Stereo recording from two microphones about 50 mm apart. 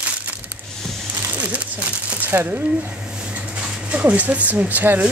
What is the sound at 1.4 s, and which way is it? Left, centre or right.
Speech, right.